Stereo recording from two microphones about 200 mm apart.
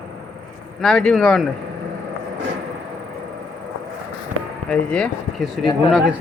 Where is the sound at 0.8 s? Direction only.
5° left (ahead or behind).